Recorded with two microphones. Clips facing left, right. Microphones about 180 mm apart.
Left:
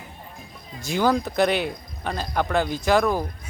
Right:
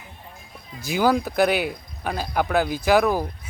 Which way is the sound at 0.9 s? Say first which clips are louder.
Right 1 dB; 5° right (ahead or behind).